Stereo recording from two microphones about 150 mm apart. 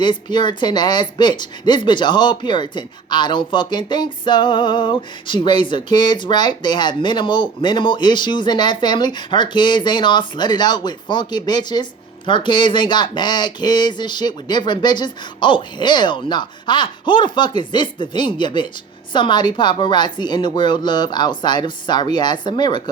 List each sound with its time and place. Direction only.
0.0 s speech: 30° left (ahead or behind)